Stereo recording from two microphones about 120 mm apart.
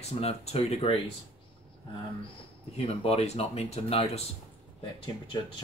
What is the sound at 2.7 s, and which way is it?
Speech, 60° left (ahead or behind).